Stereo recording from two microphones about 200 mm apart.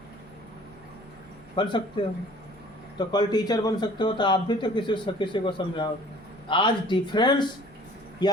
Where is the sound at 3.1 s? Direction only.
20° left (ahead or behind).